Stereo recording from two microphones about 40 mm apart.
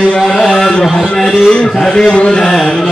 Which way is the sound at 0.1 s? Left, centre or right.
Centre.